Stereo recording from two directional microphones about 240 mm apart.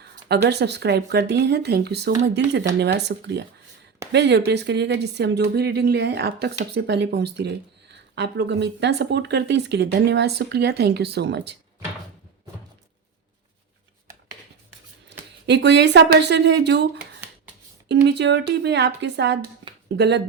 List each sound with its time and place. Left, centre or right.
0.4 s speech: right
15.4 s speech: right